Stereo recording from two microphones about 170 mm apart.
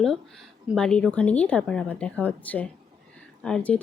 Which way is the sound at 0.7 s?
5° left (ahead or behind).